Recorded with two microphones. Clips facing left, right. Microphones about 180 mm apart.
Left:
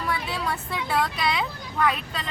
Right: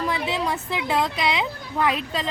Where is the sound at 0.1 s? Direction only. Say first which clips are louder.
Right 3 dB; 20° right (ahead or behind).